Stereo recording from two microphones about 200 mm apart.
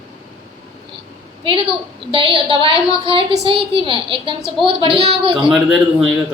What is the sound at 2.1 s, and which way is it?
A woman's voice, 25° right (ahead or behind).